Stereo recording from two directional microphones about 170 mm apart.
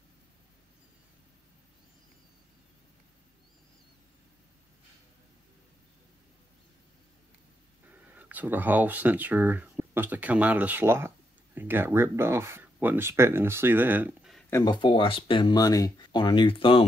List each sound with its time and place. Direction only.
7.9 s speech: 10° right (ahead or behind)
14.5 s speech: 25° left (ahead or behind)